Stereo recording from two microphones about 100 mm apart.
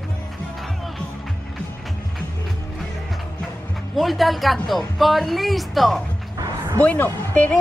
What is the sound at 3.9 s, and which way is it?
A woman's voice, centre (ahead or behind).